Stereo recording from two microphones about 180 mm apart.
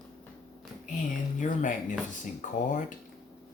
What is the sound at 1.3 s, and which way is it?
Speech, 45° left (ahead or behind).